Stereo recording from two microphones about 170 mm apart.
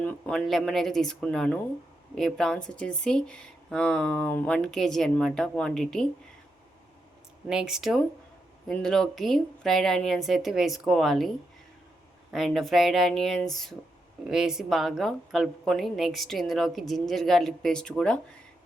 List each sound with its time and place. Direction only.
0.0 s speech: 10° left (ahead or behind)
7.4 s speech: 5° right (ahead or behind)
12.3 s speech: centre (ahead or behind)